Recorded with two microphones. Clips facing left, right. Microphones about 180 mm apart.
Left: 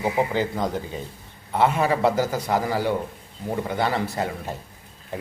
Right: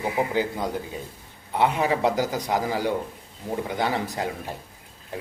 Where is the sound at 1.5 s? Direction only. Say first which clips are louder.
Left 2 dB; 15° right (ahead or behind).